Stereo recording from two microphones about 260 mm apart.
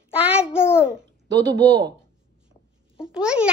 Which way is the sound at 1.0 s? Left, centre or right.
Centre.